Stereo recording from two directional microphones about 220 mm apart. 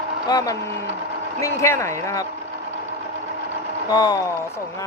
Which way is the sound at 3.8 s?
20° left (ahead or behind).